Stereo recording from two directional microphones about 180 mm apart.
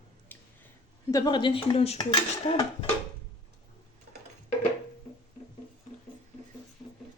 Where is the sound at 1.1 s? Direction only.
20° left (ahead or behind).